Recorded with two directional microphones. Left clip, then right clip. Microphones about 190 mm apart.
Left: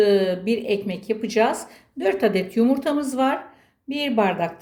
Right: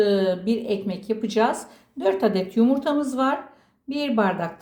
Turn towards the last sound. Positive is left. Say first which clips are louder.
# left 2 dB
turn(degrees=15)  # may be behind; listen again after turning